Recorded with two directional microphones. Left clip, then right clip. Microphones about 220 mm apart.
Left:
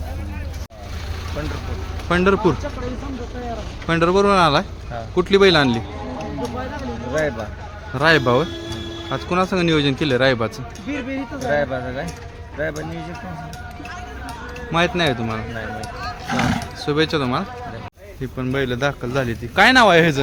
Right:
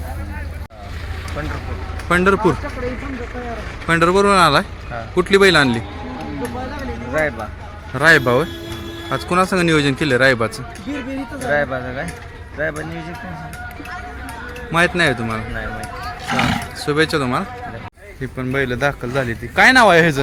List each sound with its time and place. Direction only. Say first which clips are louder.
2.0 s speech: right 2 dB; centre (ahead or behind)
3.8 s speech: right 2 dB; centre (ahead or behind)
7.9 s speech: right 3 dB; centre (ahead or behind)
14.7 s speech: right 3 dB; centre (ahead or behind)
16.2 s roaring cats: right 3 dB; 15° right (ahead or behind)
16.8 s speech: right 2 dB; centre (ahead or behind)